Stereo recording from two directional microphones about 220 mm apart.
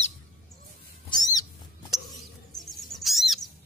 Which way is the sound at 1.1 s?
15° left (ahead or behind).